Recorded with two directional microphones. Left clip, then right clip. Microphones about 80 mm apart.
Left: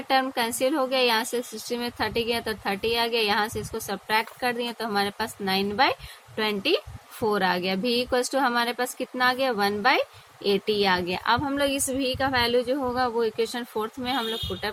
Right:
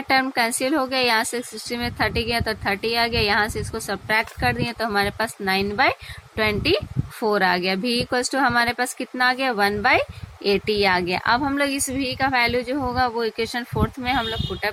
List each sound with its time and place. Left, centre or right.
0.1 s a woman's voice: right
11.5 s a woman's voice: centre